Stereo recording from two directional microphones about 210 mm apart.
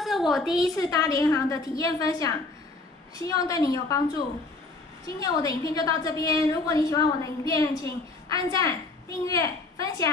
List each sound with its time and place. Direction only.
0.0 s a woman's voice: centre (ahead or behind)
0.7 s a woman's voice: 15° left (ahead or behind)
5.0 s a woman's voice: 15° left (ahead or behind)